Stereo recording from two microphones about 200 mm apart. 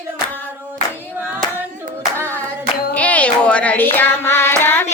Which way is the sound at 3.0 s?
5° left (ahead or behind).